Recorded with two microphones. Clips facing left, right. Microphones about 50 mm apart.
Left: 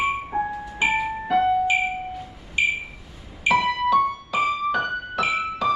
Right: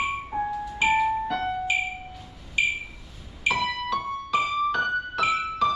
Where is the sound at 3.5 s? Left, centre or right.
Left.